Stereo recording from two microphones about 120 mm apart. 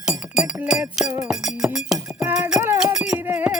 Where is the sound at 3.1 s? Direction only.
15° right (ahead or behind).